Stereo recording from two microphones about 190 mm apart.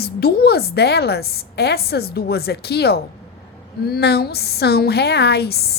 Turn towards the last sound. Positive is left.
turn(degrees=55)  # may be behind; listen again after turning